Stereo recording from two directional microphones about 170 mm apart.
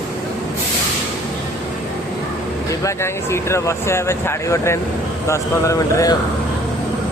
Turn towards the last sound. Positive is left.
turn(degrees=20)  # may be behind; listen again after turning